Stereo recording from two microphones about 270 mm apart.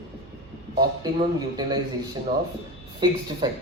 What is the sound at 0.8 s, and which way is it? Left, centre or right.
A man's voice, centre.